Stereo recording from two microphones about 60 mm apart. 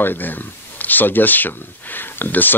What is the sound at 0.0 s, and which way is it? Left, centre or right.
Speech, left.